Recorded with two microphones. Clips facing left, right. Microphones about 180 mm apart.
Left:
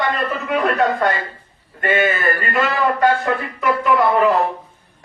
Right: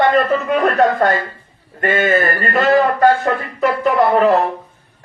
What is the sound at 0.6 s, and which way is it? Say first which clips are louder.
A man's voice: right 1 dB; 45° right (ahead or behind).